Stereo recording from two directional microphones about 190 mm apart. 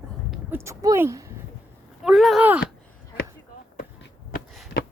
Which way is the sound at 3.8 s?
55° left (ahead or behind).